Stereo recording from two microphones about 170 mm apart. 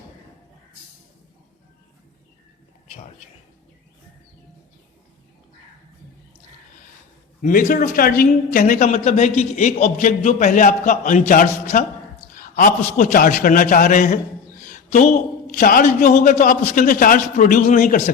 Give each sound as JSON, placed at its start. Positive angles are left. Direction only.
{"t": 7.4, "sound": "a man's voice", "side_deg": 50}
{"t": 8.9, "sound": "a man's voice", "side_deg": 40}